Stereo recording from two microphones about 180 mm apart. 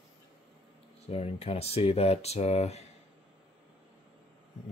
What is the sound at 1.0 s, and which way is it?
Speech, 35° left (ahead or behind).